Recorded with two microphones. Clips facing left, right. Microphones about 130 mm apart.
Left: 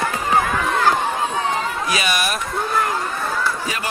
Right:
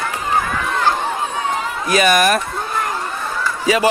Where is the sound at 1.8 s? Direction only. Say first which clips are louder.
Right 12 dB; 50° right (ahead or behind).